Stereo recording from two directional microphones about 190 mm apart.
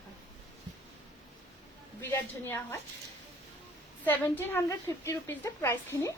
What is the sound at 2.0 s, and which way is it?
Speech, 10° left (ahead or behind).